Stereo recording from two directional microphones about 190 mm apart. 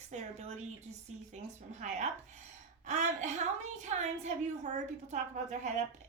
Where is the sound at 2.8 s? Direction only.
40° right (ahead or behind).